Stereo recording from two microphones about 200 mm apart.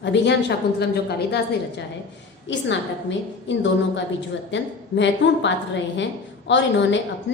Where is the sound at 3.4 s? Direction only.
65° left (ahead or behind).